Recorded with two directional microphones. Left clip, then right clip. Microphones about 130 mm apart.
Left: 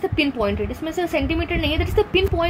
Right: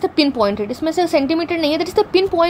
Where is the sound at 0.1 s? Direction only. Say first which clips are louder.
Right 5 dB; 50° right (ahead or behind).